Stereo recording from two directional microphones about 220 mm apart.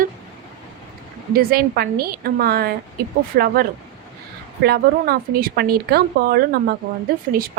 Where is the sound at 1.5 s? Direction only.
45° right (ahead or behind).